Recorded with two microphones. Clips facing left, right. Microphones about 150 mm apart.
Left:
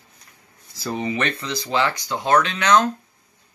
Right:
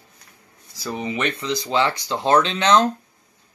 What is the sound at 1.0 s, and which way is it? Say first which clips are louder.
Speech: right 1 dB; 20° right (ahead or behind).